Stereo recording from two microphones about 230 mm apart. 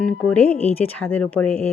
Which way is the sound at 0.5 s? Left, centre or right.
Left.